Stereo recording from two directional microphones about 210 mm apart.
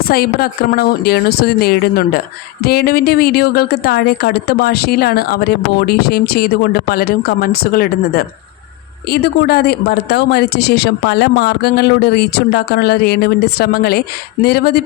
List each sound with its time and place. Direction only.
0.0 s a woman's voice: 45° left (ahead or behind)